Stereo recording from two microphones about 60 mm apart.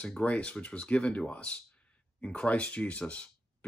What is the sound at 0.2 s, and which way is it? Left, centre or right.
Speech, left.